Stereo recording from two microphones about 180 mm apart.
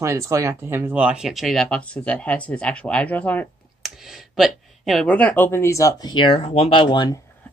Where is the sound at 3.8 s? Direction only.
Centre (ahead or behind); by 7.1 s 25° left (ahead or behind).